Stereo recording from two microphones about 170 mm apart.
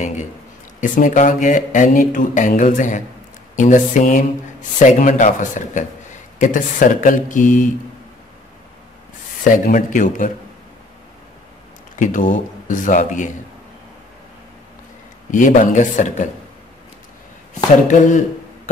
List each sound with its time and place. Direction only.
0.7 s speech: 50° left (ahead or behind)
9.4 s speech: 50° left (ahead or behind)
12.0 s speech: 50° left (ahead or behind)
15.3 s speech: 50° left (ahead or behind)
17.8 s speech: 45° left (ahead or behind)